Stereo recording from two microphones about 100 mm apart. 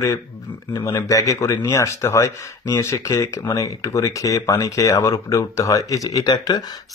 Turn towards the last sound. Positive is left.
turn(degrees=45)  # may be behind; listen again after turning